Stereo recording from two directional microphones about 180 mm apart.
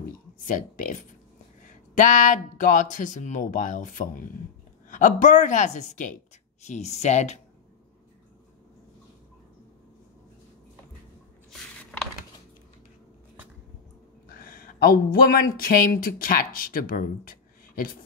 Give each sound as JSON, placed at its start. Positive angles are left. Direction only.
{"t": 0.4, "sound": "speech", "side_deg": 45}
{"t": 11.5, "sound": "a sound", "side_deg": 5}
{"t": 14.3, "sound": "speech", "side_deg": 55}